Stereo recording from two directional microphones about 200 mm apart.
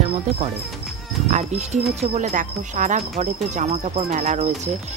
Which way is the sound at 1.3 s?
35° right (ahead or behind).